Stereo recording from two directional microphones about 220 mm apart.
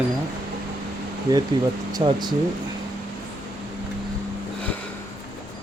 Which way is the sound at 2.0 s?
25° right (ahead or behind).